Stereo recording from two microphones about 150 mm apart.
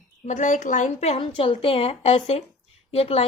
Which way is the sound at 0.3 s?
55° left (ahead or behind).